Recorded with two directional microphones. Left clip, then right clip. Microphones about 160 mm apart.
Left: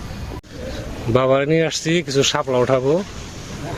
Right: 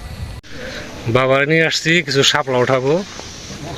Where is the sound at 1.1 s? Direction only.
5° left (ahead or behind).